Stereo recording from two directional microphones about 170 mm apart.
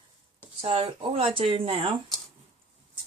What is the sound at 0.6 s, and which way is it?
Speech, 35° right (ahead or behind).